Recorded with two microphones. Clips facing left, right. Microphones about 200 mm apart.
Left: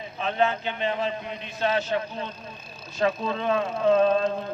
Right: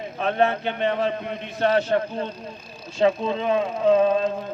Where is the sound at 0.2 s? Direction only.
60° right (ahead or behind).